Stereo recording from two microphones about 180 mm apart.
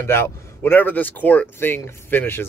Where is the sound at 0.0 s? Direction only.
15° left (ahead or behind).